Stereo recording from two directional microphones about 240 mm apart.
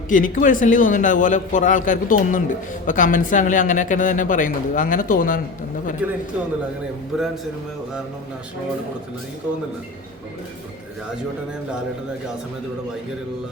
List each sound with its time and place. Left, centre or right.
0.1 s speech: left
6.0 s speech: centre